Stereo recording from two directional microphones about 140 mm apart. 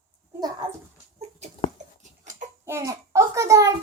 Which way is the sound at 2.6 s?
20° right (ahead or behind).